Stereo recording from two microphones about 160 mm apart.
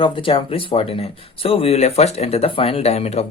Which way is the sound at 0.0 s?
35° left (ahead or behind).